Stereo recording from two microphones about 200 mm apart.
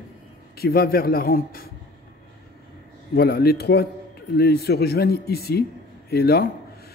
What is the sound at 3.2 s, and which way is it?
A man's voice, 50° left (ahead or behind).